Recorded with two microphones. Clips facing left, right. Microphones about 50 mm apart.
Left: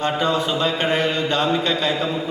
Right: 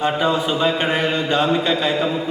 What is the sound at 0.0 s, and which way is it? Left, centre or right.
A man's voice, centre.